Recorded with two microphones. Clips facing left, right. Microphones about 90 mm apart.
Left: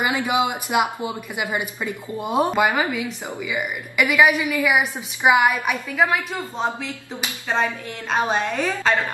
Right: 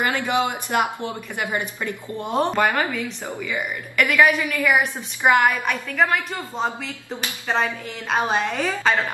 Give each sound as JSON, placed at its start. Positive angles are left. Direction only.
{"t": 0.0, "sound": "a woman's voice", "side_deg": 10}
{"t": 8.1, "sound": "a woman's voice", "side_deg": 0}